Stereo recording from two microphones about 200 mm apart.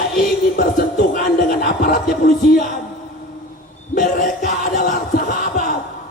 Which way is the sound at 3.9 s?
45° left (ahead or behind).